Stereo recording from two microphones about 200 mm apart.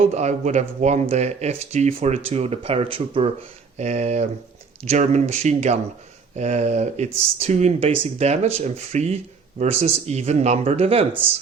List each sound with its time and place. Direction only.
0.0 s speech: 35° right (ahead or behind)